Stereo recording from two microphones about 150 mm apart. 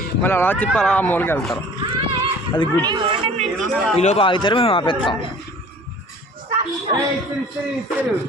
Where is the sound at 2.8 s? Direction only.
30° right (ahead or behind).